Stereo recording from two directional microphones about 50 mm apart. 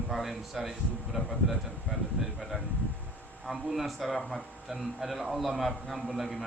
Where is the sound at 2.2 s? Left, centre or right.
Right.